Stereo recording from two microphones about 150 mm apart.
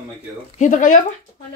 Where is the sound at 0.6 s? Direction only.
60° left (ahead or behind).